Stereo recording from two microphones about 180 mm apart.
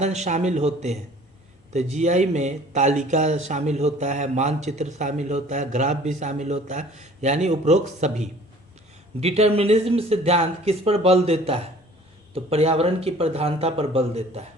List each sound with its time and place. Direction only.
0.0 s speech: 40° right (ahead or behind)